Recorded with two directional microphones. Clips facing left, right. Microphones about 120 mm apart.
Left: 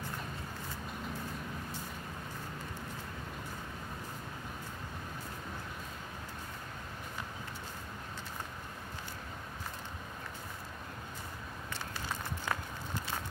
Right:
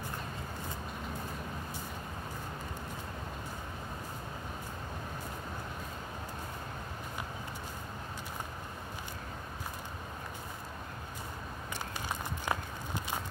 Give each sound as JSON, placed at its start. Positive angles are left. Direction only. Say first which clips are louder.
{"t": 12.1, "sound": "walk", "louder": "right 2 dB", "side_deg": -15}